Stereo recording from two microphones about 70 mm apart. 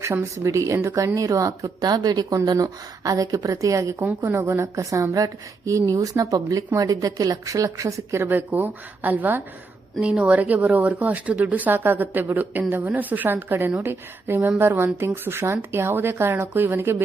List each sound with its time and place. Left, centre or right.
0.0 s a woman's voice: right
4.0 s a woman's voice: right
8.3 s speech: right
10.0 s speech: centre; by 17.0 s right